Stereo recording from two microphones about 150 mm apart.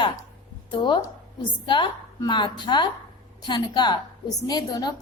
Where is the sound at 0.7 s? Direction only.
30° left (ahead or behind).